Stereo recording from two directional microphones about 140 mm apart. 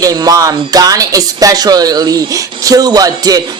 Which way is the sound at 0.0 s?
25° right (ahead or behind).